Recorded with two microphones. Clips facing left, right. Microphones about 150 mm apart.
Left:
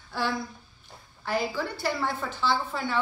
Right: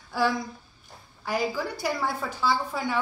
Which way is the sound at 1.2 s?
10° right (ahead or behind).